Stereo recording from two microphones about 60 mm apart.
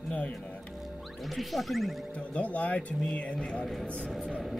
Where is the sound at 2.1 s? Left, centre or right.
Left.